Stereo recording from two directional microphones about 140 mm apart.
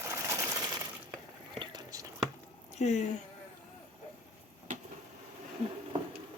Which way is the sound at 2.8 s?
55° left (ahead or behind).